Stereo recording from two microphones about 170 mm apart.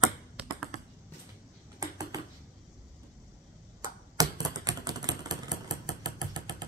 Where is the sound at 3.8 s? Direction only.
20° right (ahead or behind).